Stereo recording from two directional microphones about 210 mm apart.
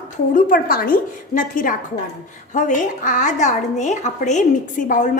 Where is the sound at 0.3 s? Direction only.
40° left (ahead or behind).